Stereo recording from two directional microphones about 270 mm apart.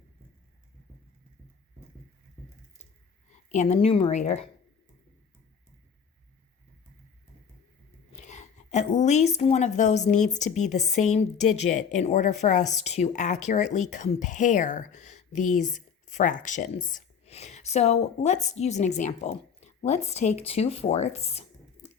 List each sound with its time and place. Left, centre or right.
3.5 s a woman's voice: left
8.1 s a woman's voice: left
21.8 s a sound: left